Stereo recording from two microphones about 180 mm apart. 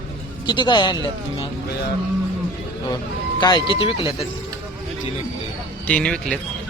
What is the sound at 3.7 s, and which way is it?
Speech, 30° left (ahead or behind).